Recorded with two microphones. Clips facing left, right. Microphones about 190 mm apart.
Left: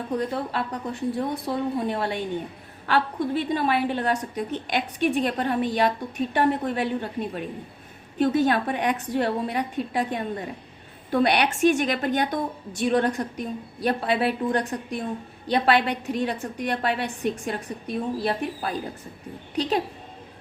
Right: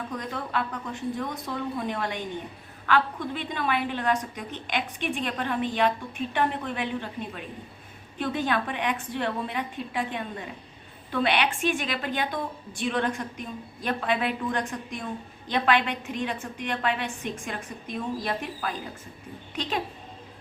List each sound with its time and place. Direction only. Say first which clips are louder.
0.1 s a woman's voice: left 8 dB; 35° left (ahead or behind)